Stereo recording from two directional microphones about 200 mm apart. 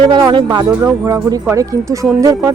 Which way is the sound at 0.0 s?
20° right (ahead or behind).